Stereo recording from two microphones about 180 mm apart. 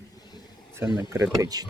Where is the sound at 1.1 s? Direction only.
20° right (ahead or behind).